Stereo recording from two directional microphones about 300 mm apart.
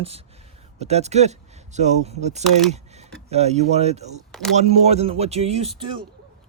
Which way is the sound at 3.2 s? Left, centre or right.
Right.